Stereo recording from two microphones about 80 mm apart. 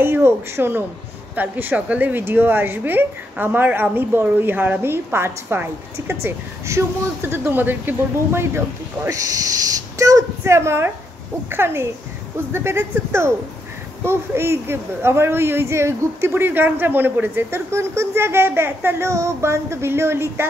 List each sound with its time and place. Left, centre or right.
0.0 s a woman's voice: right
9.9 s speech: right
10.5 s a woman's voice: right